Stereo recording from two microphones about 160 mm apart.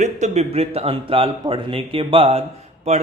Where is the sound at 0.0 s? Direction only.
45° right (ahead or behind).